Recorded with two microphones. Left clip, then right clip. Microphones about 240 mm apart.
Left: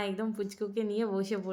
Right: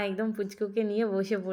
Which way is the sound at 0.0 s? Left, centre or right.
Centre.